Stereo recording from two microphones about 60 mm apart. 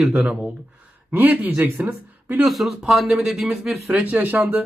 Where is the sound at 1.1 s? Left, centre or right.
Right.